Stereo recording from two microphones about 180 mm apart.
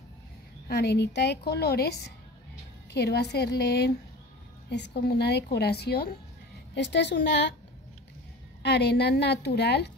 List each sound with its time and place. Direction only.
0.7 s a woman's voice: 65° left (ahead or behind)
6.7 s a woman's voice: 75° left (ahead or behind)
8.6 s a woman's voice: 70° left (ahead or behind)